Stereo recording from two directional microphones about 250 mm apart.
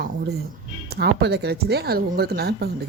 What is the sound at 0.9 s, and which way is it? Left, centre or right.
Speech, right.